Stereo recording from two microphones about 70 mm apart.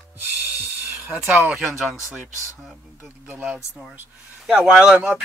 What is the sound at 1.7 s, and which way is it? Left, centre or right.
Speech, centre.